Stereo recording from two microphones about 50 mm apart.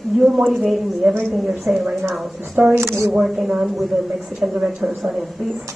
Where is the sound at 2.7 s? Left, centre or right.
Right.